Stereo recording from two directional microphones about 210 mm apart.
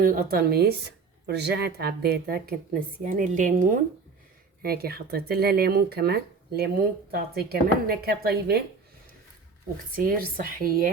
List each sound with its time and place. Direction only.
0.0 s a woman's voice: 45° right (ahead or behind)
9.9 s speech: 45° right (ahead or behind)